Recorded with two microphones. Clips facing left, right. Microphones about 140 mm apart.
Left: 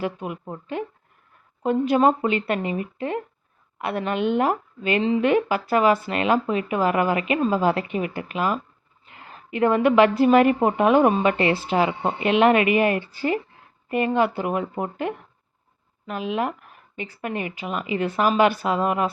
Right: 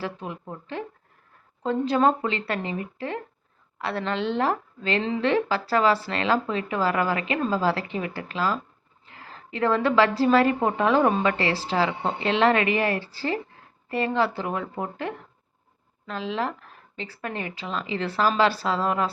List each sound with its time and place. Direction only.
0.0 s a woman's voice: 15° left (ahead or behind)